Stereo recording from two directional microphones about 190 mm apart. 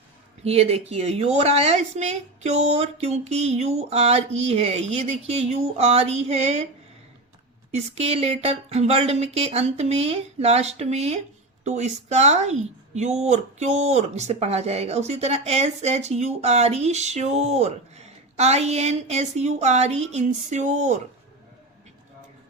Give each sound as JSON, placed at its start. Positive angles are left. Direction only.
{"t": 0.4, "sound": "a woman's voice", "side_deg": -30}
{"t": 7.7, "sound": "a woman's voice", "side_deg": -35}